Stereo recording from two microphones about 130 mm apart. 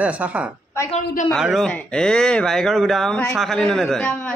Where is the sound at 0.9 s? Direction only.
70° left (ahead or behind).